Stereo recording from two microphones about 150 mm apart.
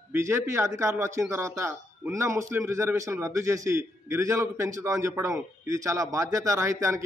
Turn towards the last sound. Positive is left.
turn(degrees=-20)  # may be behind; listen again after turning